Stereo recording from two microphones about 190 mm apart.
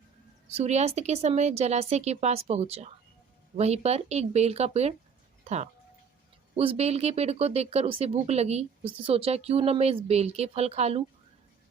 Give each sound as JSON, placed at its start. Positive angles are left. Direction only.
{"t": 0.5, "sound": "speech", "side_deg": -35}
{"t": 6.6, "sound": "speech", "side_deg": -30}